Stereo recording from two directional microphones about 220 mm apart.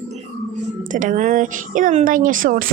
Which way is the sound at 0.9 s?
35° right (ahead or behind).